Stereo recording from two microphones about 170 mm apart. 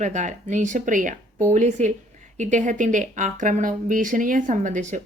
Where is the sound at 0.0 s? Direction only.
45° right (ahead or behind).